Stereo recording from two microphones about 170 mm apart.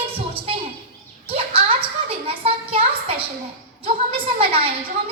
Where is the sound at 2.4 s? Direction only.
35° right (ahead or behind).